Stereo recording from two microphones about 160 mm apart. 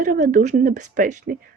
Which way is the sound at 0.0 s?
55° right (ahead or behind).